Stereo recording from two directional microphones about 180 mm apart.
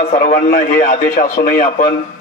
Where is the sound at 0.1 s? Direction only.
45° left (ahead or behind).